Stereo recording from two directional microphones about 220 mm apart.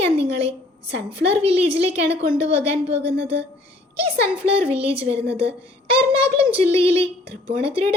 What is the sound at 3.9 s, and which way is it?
A child's voice, 25° right (ahead or behind).